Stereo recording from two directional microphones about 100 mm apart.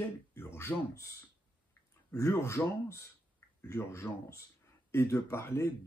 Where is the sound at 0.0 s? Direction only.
25° left (ahead or behind).